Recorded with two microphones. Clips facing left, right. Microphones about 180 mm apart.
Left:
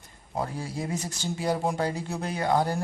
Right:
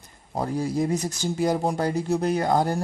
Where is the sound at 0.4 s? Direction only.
40° right (ahead or behind).